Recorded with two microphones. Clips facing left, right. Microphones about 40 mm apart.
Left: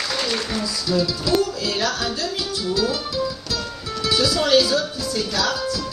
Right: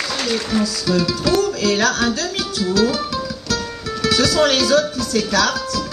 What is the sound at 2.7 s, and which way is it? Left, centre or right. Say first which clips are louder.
Music: right 5 dB; right.